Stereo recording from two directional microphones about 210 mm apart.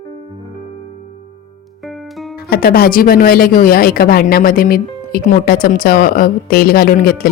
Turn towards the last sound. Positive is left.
turn(degrees=45)  # may be behind; listen again after turning